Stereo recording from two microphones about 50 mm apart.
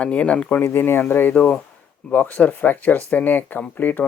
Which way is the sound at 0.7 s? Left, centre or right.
Left.